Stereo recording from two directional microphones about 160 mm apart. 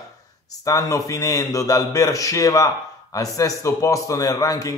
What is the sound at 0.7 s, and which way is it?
A man's voice, 20° left (ahead or behind).